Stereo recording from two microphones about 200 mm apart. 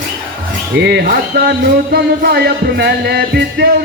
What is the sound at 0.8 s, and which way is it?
Speech, 55° right (ahead or behind).